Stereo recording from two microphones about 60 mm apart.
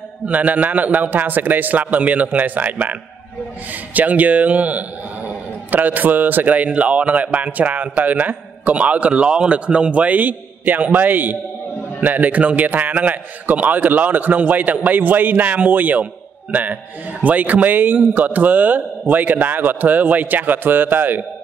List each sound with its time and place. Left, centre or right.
0.3 s a man's voice: right
17.2 s a man's voice: right